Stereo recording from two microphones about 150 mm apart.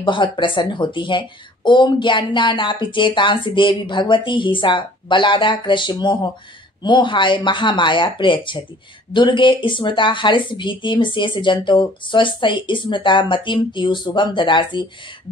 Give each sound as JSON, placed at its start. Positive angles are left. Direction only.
{"t": 0.0, "sound": "speech", "side_deg": 30}